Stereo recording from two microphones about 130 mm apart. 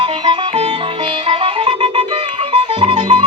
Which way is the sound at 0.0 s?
45° right (ahead or behind).